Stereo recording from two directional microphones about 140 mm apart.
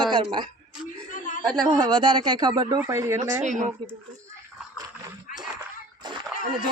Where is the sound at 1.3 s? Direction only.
65° left (ahead or behind).